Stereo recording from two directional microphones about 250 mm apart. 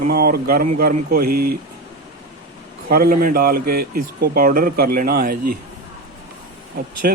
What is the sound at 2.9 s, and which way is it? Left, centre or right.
Speech, right.